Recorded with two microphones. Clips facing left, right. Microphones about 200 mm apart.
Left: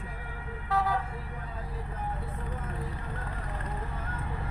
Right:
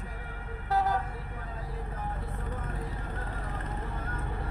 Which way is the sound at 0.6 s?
45° right (ahead or behind).